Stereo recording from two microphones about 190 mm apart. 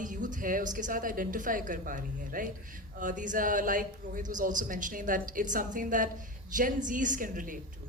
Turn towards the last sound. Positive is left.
turn(degrees=-45)  # may be behind; listen again after turning